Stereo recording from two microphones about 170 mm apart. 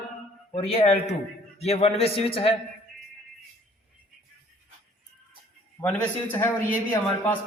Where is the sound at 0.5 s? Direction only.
35° left (ahead or behind).